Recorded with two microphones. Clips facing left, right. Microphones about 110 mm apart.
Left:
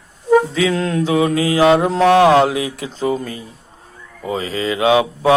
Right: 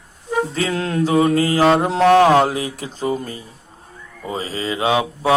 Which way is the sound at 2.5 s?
35° right (ahead or behind).